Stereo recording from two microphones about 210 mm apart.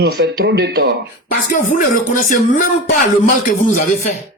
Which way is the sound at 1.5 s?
40° left (ahead or behind).